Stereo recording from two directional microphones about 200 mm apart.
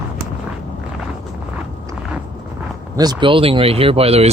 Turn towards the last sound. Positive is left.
turn(degrees=-30)  # may be behind; listen again after turning